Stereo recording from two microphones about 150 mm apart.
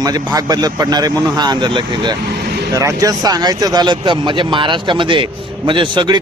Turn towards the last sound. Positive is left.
turn(degrees=-30)  # may be behind; listen again after turning